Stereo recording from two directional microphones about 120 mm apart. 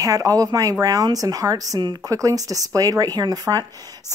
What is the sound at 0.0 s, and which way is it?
Speech, 30° right (ahead or behind).